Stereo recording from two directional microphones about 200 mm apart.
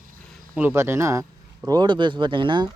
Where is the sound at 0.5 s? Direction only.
10° right (ahead or behind).